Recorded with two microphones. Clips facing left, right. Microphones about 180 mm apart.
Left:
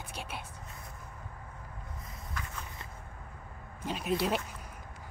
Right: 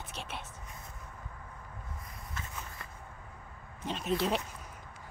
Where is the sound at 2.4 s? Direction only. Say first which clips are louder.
Left 2 dB; 25° right (ahead or behind).